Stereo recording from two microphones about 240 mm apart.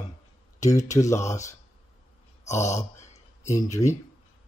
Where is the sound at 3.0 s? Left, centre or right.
Left.